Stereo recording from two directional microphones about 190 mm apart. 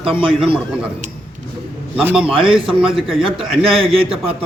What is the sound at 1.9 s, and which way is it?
A man's voice, 5° right (ahead or behind).